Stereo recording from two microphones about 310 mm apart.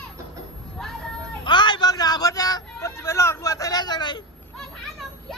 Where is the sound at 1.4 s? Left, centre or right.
Centre.